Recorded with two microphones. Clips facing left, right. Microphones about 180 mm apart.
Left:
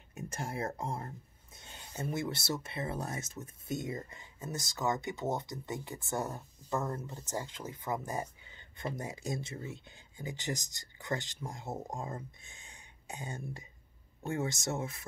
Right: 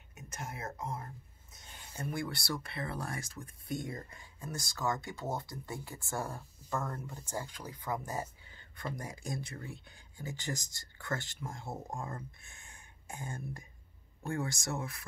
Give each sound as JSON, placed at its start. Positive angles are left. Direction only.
{"t": 0.3, "sound": "speech", "side_deg": 35}